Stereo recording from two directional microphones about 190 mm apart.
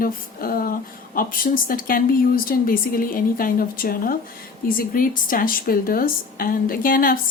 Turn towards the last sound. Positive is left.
turn(degrees=50)  # may be behind; listen again after turning